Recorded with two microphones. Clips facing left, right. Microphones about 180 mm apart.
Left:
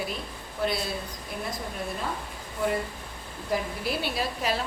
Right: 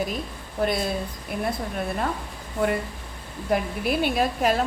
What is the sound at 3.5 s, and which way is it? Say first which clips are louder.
A woman's voice: right 5 dB; 60° right (ahead or behind).